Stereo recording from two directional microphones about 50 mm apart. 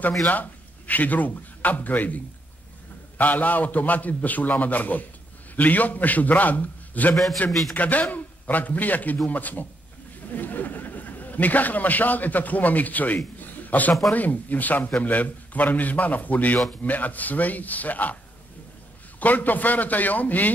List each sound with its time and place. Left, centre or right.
0.3 s a man's voice: left
13.4 s a sound: left
14.1 s a man's voice: left
19.1 s a man's voice: left